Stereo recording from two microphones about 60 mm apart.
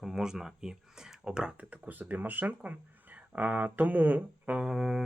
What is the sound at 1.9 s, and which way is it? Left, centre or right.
Speech, right.